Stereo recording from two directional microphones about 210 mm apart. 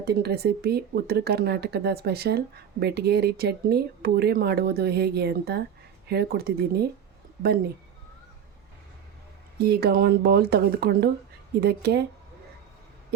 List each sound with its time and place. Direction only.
0.0 s speech: 50° right (ahead or behind)
9.6 s speech: 50° right (ahead or behind)